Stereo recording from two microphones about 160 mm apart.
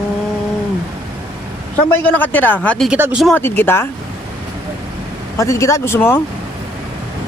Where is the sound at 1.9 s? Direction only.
10° left (ahead or behind).